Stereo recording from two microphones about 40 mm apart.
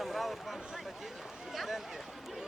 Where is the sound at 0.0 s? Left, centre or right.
Centre.